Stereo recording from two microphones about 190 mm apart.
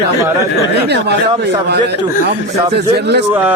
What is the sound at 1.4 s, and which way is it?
Speech, 60° right (ahead or behind).